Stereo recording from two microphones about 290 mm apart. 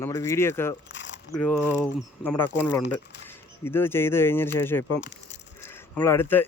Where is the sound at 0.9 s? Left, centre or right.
Left.